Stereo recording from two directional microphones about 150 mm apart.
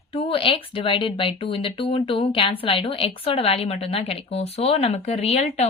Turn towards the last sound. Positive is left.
turn(degrees=45)  # may be behind; listen again after turning